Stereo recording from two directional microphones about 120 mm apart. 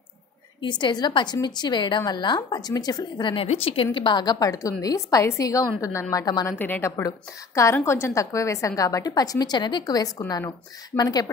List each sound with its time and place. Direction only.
0.6 s a woman's voice: 40° left (ahead or behind)
3.4 s a woman's voice: 50° left (ahead or behind); by 6.5 s 30° left (ahead or behind)
6.6 s a woman's voice: 15° left (ahead or behind)
7.0 s a woman's voice: 25° left (ahead or behind)